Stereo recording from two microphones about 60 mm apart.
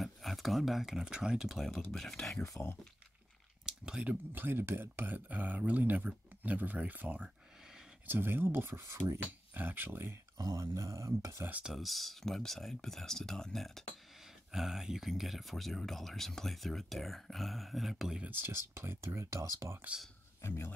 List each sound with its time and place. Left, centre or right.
0.0 s speech: centre
2.4 s speech: left
3.6 s a sound: centre
4.0 s speech: right
9.5 s speech: right
10.3 s a sound: right
10.7 s speech: right
11.6 s speech: centre
18.3 s speech: right
20.4 s speech: left